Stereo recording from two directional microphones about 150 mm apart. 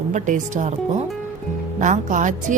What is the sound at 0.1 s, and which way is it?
A woman's voice, 55° right (ahead or behind).